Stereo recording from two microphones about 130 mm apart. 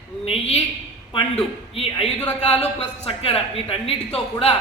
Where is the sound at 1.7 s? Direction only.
45° left (ahead or behind).